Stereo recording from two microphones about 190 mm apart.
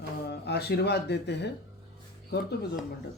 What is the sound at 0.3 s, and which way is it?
Speech, 60° left (ahead or behind).